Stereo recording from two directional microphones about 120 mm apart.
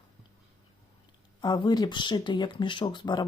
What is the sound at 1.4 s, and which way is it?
Speech, 35° left (ahead or behind).